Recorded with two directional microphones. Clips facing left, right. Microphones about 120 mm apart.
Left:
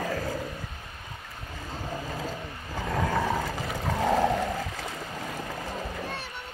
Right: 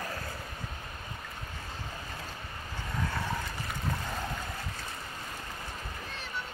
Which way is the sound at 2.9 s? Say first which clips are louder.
Left 8 dB; 90° left.